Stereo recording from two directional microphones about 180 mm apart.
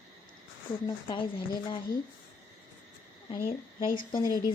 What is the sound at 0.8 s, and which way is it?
Speech, 30° left (ahead or behind).